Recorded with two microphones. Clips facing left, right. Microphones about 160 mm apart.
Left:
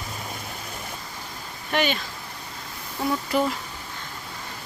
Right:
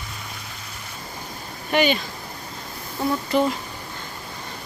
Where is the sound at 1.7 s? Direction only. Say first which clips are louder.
Right 4 dB; centre (ahead or behind).